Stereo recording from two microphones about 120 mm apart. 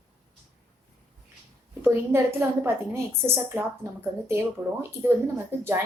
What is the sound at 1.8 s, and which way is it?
A woman's voice, 20° right (ahead or behind).